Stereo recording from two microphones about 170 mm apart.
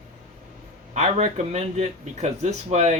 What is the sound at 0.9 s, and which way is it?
Speech, 40° right (ahead or behind).